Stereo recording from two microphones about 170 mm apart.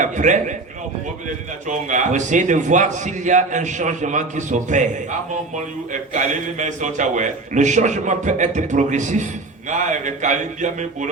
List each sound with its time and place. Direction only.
0.0 s a man's voice: 45° right (ahead or behind)
1.6 s a man's voice: 45° right (ahead or behind)